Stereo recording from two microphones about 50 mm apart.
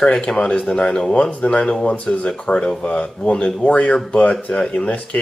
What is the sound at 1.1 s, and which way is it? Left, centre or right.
Speech, left.